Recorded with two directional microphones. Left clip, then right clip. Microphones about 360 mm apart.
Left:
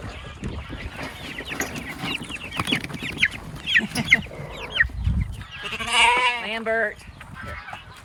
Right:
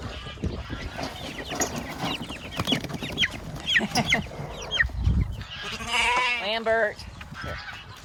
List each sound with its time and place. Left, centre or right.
1.5 s chicken: centre
5.5 s goat: centre
6.5 s speech: centre